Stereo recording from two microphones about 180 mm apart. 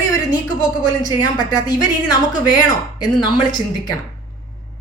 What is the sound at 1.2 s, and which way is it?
A woman's voice, 20° left (ahead or behind).